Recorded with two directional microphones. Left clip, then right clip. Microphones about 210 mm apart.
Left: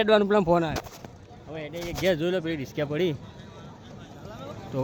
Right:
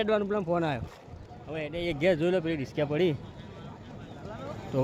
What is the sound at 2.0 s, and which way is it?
Speech, centre (ahead or behind).